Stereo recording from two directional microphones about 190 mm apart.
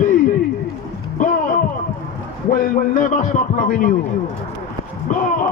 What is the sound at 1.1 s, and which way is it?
Speech, 40° left (ahead or behind).